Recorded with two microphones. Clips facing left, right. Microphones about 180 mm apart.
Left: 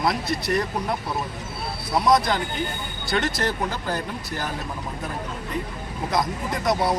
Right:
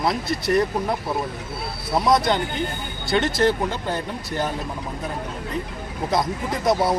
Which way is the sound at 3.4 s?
25° right (ahead or behind).